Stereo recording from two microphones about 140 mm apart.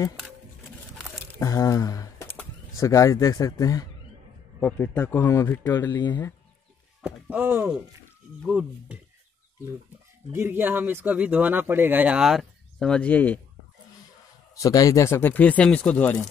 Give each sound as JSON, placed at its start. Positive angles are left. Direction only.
{"t": 1.1, "sound": "squish", "side_deg": 25}
{"t": 2.8, "sound": "speech", "side_deg": 20}
{"t": 4.6, "sound": "speech", "side_deg": 10}
{"t": 7.0, "sound": "speech", "side_deg": -5}
{"t": 10.3, "sound": "speech", "side_deg": -15}
{"t": 14.5, "sound": "speech", "side_deg": 25}